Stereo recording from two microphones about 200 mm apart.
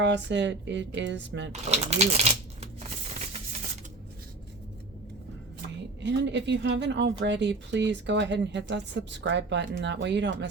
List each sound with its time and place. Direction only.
0.0 s speech: 60° right (ahead or behind)
1.7 s speech: 35° right (ahead or behind)
6.0 s speech: 60° right (ahead or behind)